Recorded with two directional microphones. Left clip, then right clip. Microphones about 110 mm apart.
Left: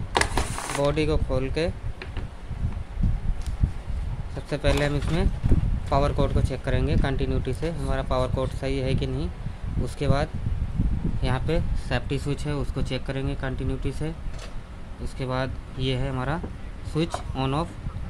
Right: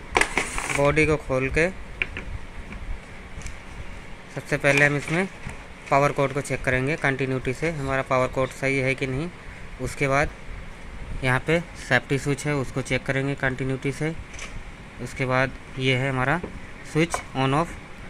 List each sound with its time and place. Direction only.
0.1 s mechanisms: 5° left (ahead or behind)
0.8 s speech: 10° right (ahead or behind)
4.4 s speech: centre (ahead or behind); by 14.1 s 20° right (ahead or behind)
15.1 s speech: 20° right (ahead or behind)